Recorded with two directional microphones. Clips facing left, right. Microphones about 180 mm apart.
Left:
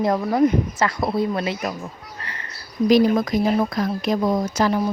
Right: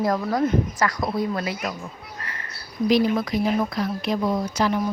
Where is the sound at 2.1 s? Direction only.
30° left (ahead or behind).